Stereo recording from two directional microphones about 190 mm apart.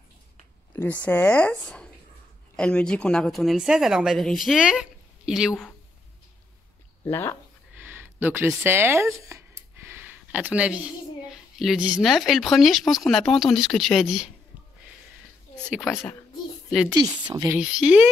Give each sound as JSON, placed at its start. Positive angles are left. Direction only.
{"t": 1.0, "sound": "speech", "side_deg": 10}
{"t": 7.1, "sound": "speech", "side_deg": 10}
{"t": 7.8, "sound": "a sound", "side_deg": -10}
{"t": 8.6, "sound": "a child's voice", "side_deg": -10}
{"t": 15.8, "sound": "speech", "side_deg": 0}
{"t": 17.3, "sound": "speech", "side_deg": -20}
{"t": 17.6, "sound": "speech", "side_deg": -5}